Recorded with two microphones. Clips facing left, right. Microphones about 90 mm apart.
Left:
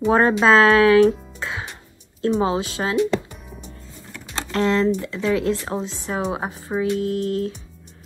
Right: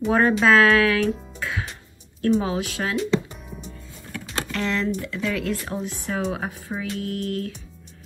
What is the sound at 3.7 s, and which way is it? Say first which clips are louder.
A woman's voice: right 3 dB; 25° left (ahead or behind).